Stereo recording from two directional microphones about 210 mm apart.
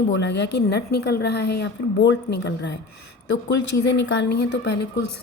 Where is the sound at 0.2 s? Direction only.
55° left (ahead or behind).